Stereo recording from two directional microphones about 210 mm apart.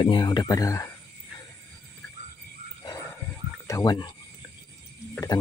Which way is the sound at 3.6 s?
15° left (ahead or behind).